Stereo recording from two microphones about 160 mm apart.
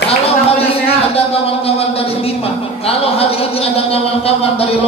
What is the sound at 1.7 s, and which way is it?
A woman's voice, 35° left (ahead or behind).